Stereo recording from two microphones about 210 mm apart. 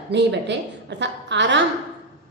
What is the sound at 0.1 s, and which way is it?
A woman's voice, 55° right (ahead or behind).